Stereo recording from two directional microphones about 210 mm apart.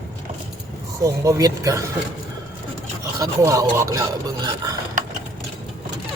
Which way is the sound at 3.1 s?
15° right (ahead or behind).